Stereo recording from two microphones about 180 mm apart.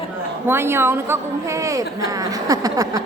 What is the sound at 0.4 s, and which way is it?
A woman's voice, 15° right (ahead or behind).